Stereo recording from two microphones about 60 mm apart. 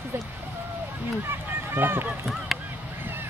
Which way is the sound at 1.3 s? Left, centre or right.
Right.